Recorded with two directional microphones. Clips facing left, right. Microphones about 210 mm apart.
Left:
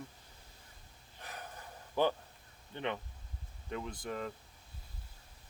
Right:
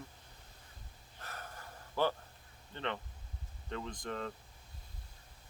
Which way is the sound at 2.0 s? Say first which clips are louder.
Left 2 dB; 20° left (ahead or behind).